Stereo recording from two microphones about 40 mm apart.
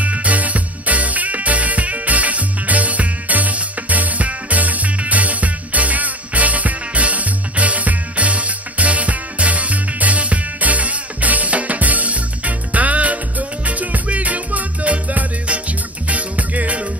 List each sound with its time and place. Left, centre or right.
0.0 s music: right